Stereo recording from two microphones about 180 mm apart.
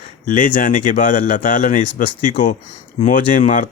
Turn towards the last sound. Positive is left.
turn(degrees=45)  # may be behind; listen again after turning